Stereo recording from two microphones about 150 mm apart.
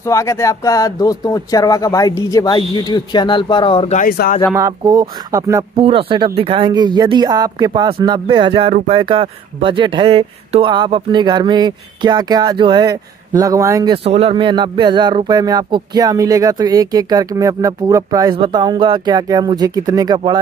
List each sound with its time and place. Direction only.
0.0 s speech: 20° left (ahead or behind)
3.9 s speech: 75° left (ahead or behind)
4.6 s speech: 25° right (ahead or behind)
5.8 s speech: 35° right (ahead or behind); by 13.9 s 20° right (ahead or behind)
14.0 s speech: 40° right (ahead or behind); by 20.3 s 25° right (ahead or behind)